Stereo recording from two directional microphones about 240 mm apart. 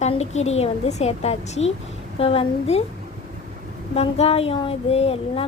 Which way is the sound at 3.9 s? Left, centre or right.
Left.